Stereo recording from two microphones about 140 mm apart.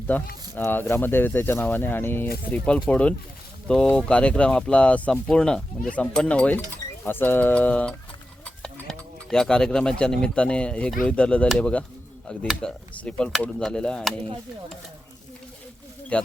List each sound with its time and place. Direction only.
0.1 s speech: 10° left (ahead or behind)
16.1 s speech: 10° left (ahead or behind)